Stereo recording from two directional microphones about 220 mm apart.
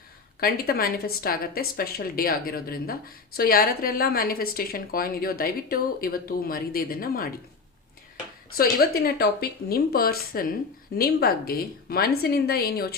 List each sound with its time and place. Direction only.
0.3 s a woman's voice: 45° left (ahead or behind)
8.5 s a woman's voice: 45° left (ahead or behind)